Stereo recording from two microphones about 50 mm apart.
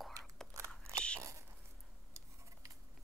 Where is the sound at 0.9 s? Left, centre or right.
Right.